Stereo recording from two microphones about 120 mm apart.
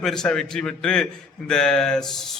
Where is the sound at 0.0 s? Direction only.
5° left (ahead or behind).